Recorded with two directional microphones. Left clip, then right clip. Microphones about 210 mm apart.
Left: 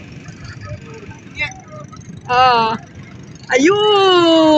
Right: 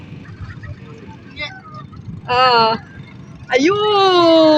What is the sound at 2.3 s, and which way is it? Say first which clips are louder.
Speech: even; 5° right (ahead or behind).